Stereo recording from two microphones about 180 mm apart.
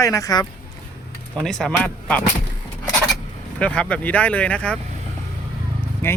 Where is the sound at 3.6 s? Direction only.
5° left (ahead or behind).